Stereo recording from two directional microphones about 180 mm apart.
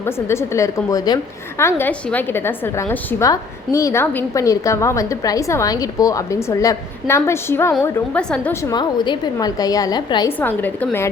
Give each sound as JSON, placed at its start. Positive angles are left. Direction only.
{"t": 0.0, "sound": "a woman's voice", "side_deg": 15}
{"t": 8.7, "sound": "a woman's voice", "side_deg": 25}